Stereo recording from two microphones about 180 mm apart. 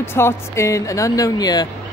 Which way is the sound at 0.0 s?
15° left (ahead or behind).